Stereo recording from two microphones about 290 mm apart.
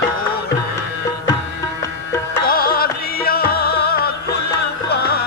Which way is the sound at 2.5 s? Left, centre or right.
Left.